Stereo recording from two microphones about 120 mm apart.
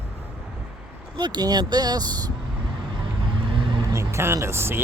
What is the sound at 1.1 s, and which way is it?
Speech, 40° right (ahead or behind).